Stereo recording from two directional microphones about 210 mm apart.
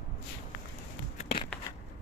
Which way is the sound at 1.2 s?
30° left (ahead or behind).